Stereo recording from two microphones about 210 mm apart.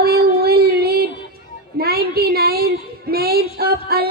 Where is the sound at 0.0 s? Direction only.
45° right (ahead or behind).